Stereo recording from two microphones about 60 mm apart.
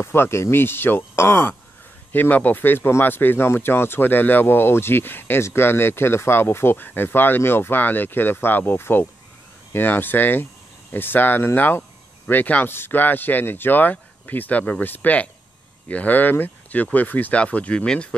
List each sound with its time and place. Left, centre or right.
0.0 s speech: left
2.1 s speech: left